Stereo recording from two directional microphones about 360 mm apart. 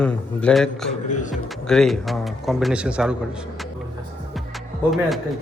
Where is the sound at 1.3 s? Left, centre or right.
Centre.